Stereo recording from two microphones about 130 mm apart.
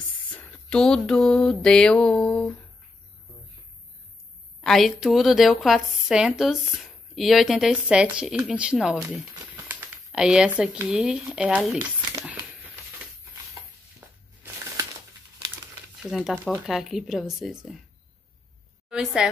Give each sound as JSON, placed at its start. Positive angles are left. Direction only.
{"t": 0.3, "sound": "mantra", "side_deg": 10}
{"t": 4.6, "sound": "a woman's voice", "side_deg": 0}
{"t": 12.3, "sound": "a sound", "side_deg": -10}
{"t": 13.6, "sound": "a sound", "side_deg": -30}
{"t": 16.0, "sound": "a woman's voice", "side_deg": -5}
{"t": 18.9, "sound": "a woman's voice", "side_deg": -5}